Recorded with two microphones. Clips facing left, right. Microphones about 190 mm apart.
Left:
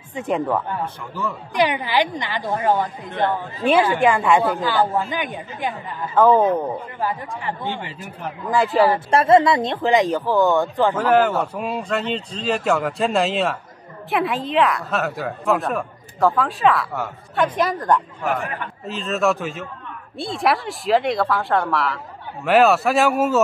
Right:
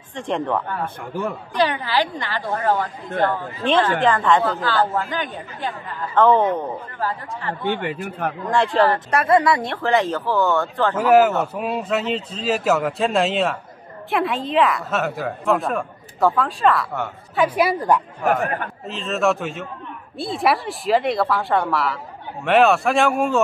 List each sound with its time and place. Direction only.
0.1 s speech: 5° left (ahead or behind)
7.6 s speech: 55° right (ahead or behind)
8.5 s speech: 5° left (ahead or behind)
9.1 s speech: 25° left (ahead or behind)
11.0 s a woman's voice: 10° right (ahead or behind)
18.2 s a man's voice: 45° right (ahead or behind)
18.9 s a woman's voice: centre (ahead or behind)